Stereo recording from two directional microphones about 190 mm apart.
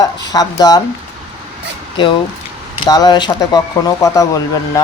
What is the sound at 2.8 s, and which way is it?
Speech, 20° left (ahead or behind).